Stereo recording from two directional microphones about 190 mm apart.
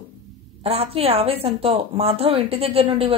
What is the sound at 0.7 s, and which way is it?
A woman's voice, 30° right (ahead or behind).